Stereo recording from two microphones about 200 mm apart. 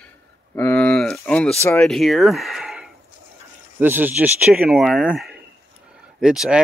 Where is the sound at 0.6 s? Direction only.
5° left (ahead or behind).